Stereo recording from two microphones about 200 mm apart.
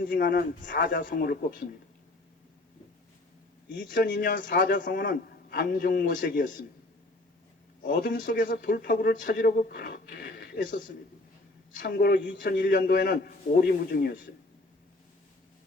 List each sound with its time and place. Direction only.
0.0 s a man's voice: 45° left (ahead or behind)
3.8 s a man's voice: 45° left (ahead or behind)
7.9 s a man's voice: 45° left (ahead or behind)
8.4 s speech: 60° left (ahead or behind)
8.8 s speech: 45° left (ahead or behind)
11.8 s a man's voice: 50° left (ahead or behind)
12.4 s a man's voice: 45° left (ahead or behind)